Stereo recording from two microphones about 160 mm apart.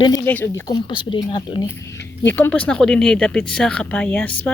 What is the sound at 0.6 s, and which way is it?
Speech, 30° left (ahead or behind).